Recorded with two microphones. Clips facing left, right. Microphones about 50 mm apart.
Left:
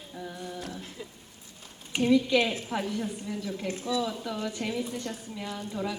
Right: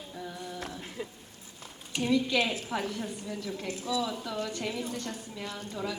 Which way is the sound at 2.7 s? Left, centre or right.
Centre.